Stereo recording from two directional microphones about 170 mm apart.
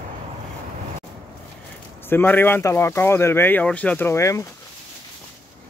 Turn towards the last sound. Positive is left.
turn(degrees=15)  # may be behind; listen again after turning